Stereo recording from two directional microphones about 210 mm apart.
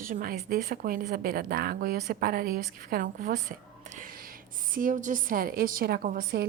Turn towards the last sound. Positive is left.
turn(degrees=-40)  # may be behind; listen again after turning